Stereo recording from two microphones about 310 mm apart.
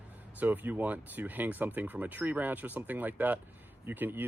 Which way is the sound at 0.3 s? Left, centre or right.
Centre.